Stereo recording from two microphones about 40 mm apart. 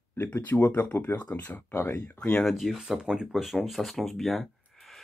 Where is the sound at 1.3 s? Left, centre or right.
Left.